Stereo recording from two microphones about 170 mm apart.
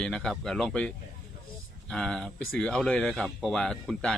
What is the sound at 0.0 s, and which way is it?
Speech, 5° left (ahead or behind).